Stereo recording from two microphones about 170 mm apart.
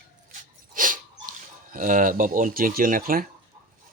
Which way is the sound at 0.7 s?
50° right (ahead or behind).